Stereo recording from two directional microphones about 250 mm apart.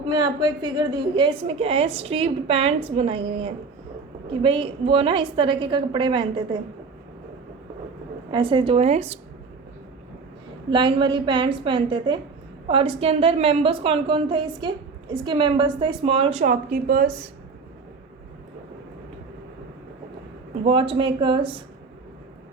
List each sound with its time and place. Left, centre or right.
0.1 s a woman's voice: centre
8.3 s a woman's voice: centre
10.7 s a woman's voice: centre; by 17.1 s right
20.7 s a woman's voice: right